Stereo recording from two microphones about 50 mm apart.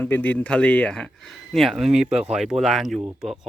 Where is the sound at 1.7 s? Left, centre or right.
Centre.